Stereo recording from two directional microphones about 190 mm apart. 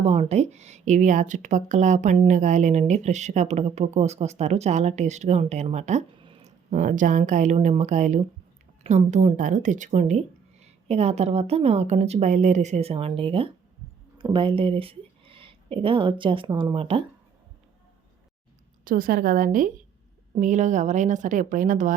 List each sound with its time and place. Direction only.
0.0 s speech: 35° right (ahead or behind)
6.7 s speech: 45° right (ahead or behind)
18.9 s a woman's voice: 50° right (ahead or behind)